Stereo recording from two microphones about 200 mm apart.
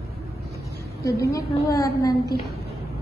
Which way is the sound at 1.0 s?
15° left (ahead or behind).